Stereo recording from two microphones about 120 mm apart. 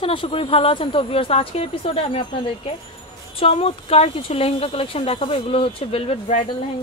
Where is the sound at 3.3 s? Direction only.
55° left (ahead or behind).